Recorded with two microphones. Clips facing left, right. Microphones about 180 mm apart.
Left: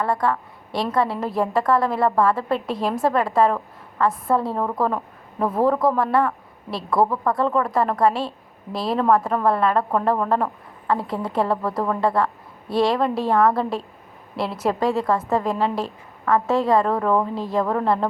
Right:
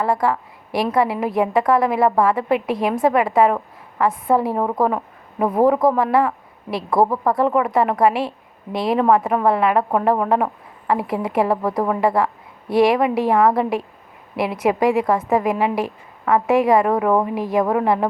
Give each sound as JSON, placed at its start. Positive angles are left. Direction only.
{"t": 0.0, "sound": "a woman's voice", "side_deg": -25}
{"t": 2.7, "sound": "a woman's voice", "side_deg": 0}
{"t": 3.1, "sound": "a woman's voice", "side_deg": -15}
{"t": 5.9, "sound": "a woman's voice", "side_deg": 0}
{"t": 6.2, "sound": "a woman's voice", "side_deg": -20}
{"t": 10.8, "sound": "a woman's voice", "side_deg": -20}